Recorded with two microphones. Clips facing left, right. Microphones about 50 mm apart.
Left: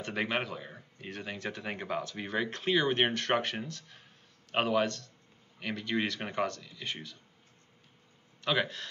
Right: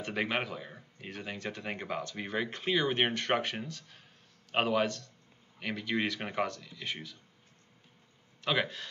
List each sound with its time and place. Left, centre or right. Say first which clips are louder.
0.0 s speech: even; centre
8.5 s speech: left 1 dB; centre